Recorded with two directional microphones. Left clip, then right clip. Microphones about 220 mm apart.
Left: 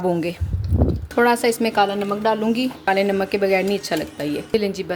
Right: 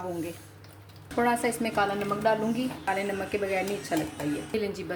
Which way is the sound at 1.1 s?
45° left (ahead or behind).